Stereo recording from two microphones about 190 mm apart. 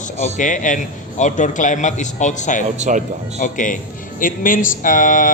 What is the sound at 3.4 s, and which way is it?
A man's voice, 45° left (ahead or behind).